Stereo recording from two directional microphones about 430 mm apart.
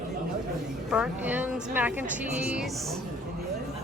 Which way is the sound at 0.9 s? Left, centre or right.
Centre.